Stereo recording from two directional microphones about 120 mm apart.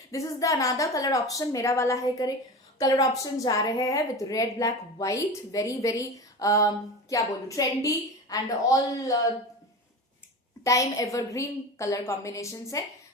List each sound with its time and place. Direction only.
0.1 s a woman's voice: 25° left (ahead or behind)
10.6 s a woman's voice: 25° left (ahead or behind)